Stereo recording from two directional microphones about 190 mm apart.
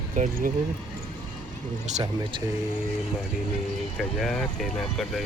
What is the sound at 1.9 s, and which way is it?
Speech, 35° right (ahead or behind).